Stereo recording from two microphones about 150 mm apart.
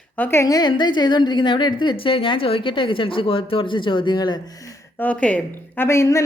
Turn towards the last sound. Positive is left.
turn(degrees=20)  # may be behind; listen again after turning